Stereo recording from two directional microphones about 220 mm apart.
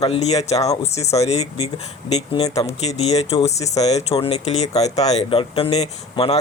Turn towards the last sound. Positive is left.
turn(degrees=25)  # may be behind; listen again after turning